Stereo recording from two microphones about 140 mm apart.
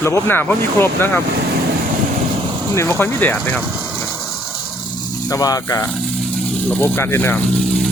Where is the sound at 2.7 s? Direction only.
20° left (ahead or behind).